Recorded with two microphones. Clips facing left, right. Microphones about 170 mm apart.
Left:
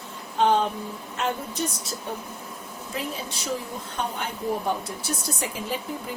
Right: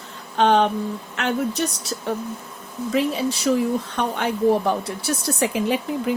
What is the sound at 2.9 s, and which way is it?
Speech, 75° right (ahead or behind).